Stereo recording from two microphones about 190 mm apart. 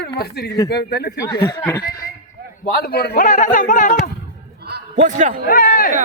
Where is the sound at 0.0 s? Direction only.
60° left (ahead or behind).